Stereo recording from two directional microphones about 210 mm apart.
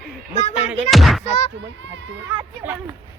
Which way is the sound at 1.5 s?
60° right (ahead or behind).